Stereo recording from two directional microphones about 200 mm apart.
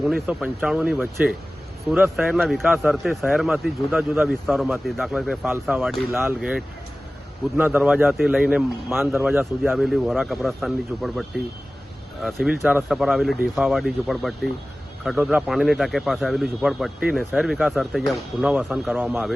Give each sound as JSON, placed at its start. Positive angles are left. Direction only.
{"t": 0.0, "sound": "a man's voice", "side_deg": -5}